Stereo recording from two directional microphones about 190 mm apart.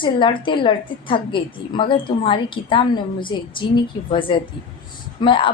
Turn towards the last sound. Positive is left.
turn(degrees=25)  # may be behind; listen again after turning